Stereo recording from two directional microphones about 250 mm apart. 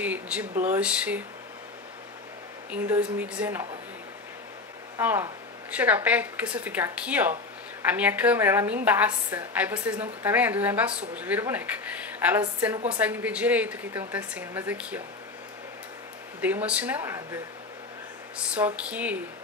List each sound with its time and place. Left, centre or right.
0.0 s a woman's voice: centre
2.7 s a woman's voice: centre
4.9 s a woman's voice: centre
16.3 s a woman's voice: centre
18.5 s a woman's voice: centre